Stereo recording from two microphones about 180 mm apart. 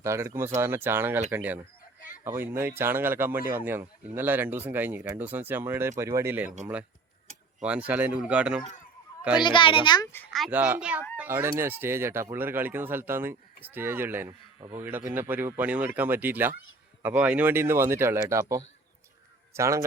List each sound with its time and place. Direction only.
0.0 s speech: 15° right (ahead or behind)
7.6 s speech: 5° right (ahead or behind)
9.4 s a child's voice: 25° left (ahead or behind)
10.3 s speech: 5° right (ahead or behind)